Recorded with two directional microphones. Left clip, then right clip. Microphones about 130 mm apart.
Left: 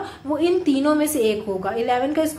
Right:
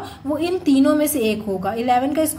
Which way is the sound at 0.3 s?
45° right (ahead or behind).